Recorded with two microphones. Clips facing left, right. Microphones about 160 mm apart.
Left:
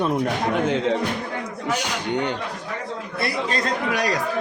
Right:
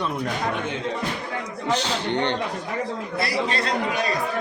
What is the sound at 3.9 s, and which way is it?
Speech, 80° left.